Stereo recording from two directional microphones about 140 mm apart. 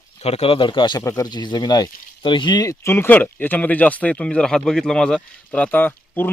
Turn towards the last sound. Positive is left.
turn(degrees=15)  # may be behind; listen again after turning